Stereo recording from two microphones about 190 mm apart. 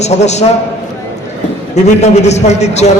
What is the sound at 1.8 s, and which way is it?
A man's voice, 35° left (ahead or behind).